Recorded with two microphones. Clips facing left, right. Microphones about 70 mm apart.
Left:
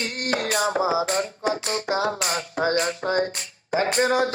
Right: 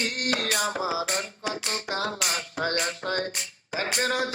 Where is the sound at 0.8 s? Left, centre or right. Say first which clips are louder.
Left 6 dB; left.